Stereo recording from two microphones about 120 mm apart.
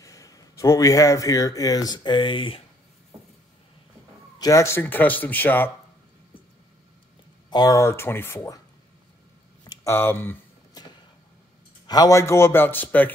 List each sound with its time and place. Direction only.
0.0 s speech: 25° left (ahead or behind); by 2.6 s 45° left (ahead or behind)
4.4 s speech: 25° left (ahead or behind)
7.4 s a man's voice: 35° left (ahead or behind)
9.8 s a man's voice: 20° left (ahead or behind)
10.7 s vehicle: 35° left (ahead or behind)
11.8 s a man's voice: 30° left (ahead or behind); by 13.1 s 15° left (ahead or behind)